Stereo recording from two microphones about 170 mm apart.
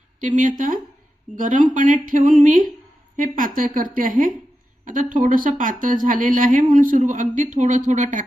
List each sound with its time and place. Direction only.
0.2 s speech: 50° right (ahead or behind)